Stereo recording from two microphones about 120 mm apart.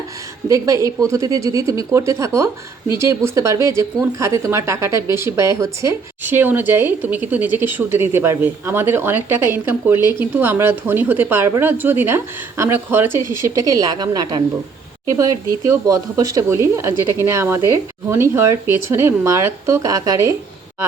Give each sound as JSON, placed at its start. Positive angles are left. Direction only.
{"t": 0.4, "sound": "a woman's voice", "side_deg": -30}